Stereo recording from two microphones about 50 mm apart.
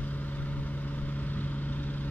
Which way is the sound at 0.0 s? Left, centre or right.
Left.